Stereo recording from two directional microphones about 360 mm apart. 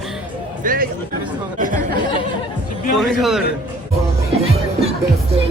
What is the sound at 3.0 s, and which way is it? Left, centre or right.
Speech, centre.